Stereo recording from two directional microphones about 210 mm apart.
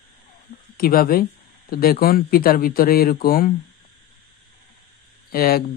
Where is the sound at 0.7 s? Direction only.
45° left (ahead or behind).